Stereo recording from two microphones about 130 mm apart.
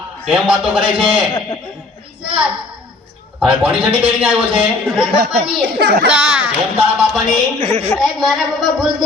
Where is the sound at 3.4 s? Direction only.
10° right (ahead or behind).